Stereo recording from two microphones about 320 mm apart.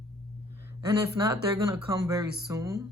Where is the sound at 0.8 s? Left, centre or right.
Centre.